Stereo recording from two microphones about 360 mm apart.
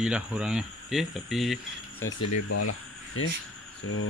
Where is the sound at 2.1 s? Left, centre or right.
Left.